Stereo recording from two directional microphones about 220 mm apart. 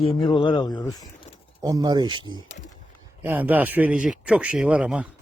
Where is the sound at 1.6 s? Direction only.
15° right (ahead or behind).